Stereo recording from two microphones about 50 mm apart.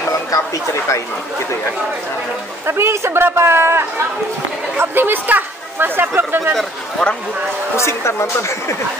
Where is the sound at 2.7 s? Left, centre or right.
Right.